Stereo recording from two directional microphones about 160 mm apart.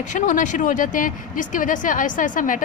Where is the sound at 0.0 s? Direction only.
50° left (ahead or behind).